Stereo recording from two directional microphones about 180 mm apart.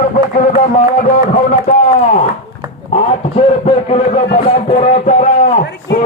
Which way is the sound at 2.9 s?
35° left (ahead or behind).